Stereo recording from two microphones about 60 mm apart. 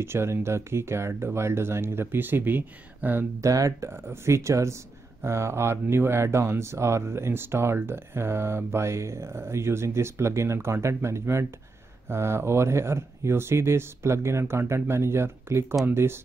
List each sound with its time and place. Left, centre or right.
0.0 s speech: right
3.3 s speech: right
3.9 s speech: right